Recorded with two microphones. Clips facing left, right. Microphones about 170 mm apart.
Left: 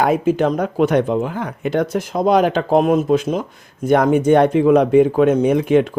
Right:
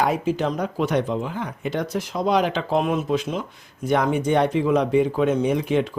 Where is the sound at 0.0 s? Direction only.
55° left (ahead or behind).